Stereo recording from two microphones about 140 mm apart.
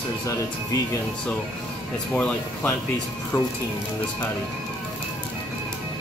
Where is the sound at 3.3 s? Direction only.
35° left (ahead or behind).